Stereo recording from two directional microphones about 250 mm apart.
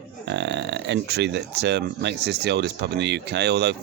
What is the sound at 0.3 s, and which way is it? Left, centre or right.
Speech, right.